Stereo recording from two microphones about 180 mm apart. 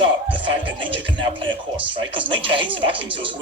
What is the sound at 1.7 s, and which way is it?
Speech, 30° right (ahead or behind).